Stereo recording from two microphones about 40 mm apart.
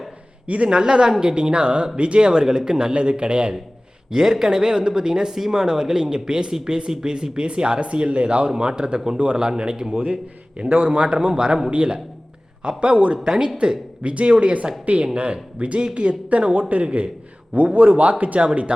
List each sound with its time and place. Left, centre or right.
0.4 s speech: right
0.7 s a man's voice: right
2.9 s a man's voice: right
4.1 s a man's voice: centre; by 13.1 s right
13.2 s speech: centre
13.6 s a man's voice: right